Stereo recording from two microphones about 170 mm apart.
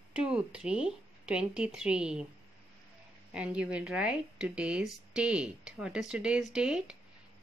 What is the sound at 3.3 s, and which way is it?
Speech, 5° right (ahead or behind).